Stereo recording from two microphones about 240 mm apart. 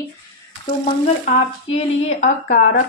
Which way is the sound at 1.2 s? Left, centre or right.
Left.